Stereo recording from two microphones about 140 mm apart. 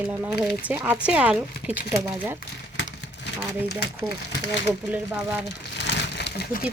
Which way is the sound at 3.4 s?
15° right (ahead or behind).